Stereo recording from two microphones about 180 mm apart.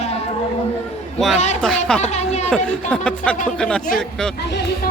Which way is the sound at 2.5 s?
5° left (ahead or behind).